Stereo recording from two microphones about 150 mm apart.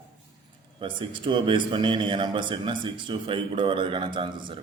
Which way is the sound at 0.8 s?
35° right (ahead or behind).